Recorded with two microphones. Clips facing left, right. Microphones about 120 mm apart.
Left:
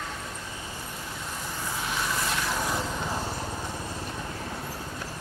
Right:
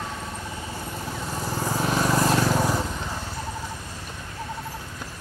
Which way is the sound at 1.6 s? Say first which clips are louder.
Right 8 dB; 40° right (ahead or behind).